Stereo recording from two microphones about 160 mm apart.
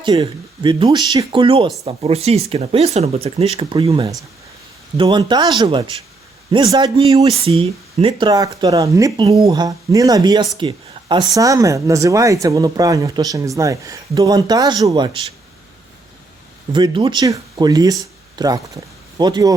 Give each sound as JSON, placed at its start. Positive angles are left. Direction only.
{"t": 0.0, "sound": "speech", "side_deg": -30}
{"t": 4.9, "sound": "speech", "side_deg": -25}
{"t": 7.4, "sound": "speech", "side_deg": -35}
{"t": 16.7, "sound": "speech", "side_deg": -30}